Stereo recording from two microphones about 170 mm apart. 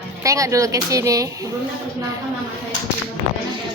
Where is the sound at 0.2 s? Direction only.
20° right (ahead or behind).